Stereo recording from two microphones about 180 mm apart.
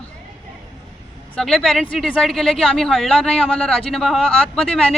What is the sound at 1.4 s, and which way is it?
Speech, centre (ahead or behind).